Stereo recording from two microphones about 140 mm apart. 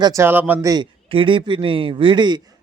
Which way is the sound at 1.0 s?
40° right (ahead or behind).